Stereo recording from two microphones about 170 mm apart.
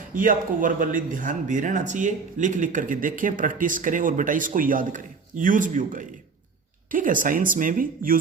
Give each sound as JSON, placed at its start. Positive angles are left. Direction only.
{"t": 0.1, "sound": "speech", "side_deg": -55}